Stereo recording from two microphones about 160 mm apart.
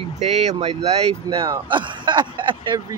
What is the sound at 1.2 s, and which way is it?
Speech, 20° right (ahead or behind).